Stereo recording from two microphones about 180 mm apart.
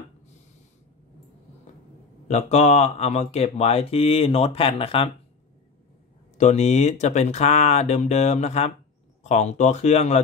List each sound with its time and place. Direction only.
2.2 s speech: 40° left (ahead or behind)
6.3 s speech: 40° left (ahead or behind)